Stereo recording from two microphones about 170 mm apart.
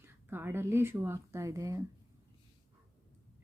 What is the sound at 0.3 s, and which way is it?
A woman's voice, 15° right (ahead or behind).